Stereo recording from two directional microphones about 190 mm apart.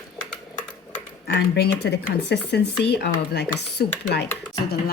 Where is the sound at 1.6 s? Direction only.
60° left (ahead or behind).